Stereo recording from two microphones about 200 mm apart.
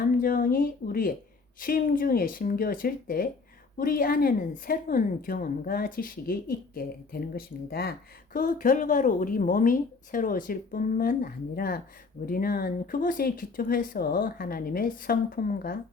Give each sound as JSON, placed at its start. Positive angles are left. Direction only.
{"t": 0.0, "sound": "a woman's voice", "side_deg": 45}